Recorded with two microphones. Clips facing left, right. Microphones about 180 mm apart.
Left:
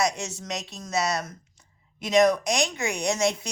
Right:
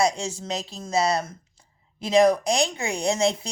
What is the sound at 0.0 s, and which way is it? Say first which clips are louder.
Speech: right 3 dB; 30° right (ahead or behind).